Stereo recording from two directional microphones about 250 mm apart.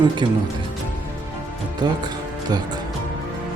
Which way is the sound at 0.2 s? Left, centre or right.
Centre.